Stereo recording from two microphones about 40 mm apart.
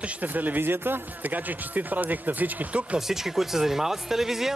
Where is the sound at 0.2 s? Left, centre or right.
Right.